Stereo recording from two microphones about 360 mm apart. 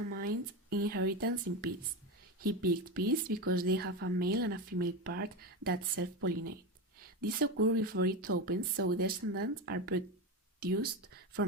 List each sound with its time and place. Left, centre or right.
0.1 s speech: right
8.7 s speech: right
9.0 s speech: right